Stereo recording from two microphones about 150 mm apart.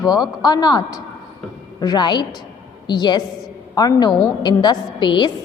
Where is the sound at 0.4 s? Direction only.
30° left (ahead or behind).